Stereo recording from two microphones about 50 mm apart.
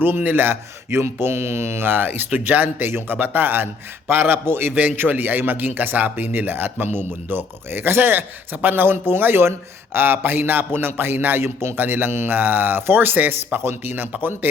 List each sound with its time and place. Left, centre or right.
0.0 s speech: right
0.5 s speech: right
4.9 s speech: right